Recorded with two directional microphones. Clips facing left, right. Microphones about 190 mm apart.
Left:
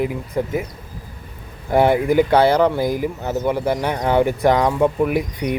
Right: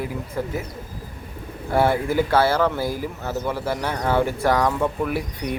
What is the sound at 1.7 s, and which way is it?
Speech, 15° left (ahead or behind).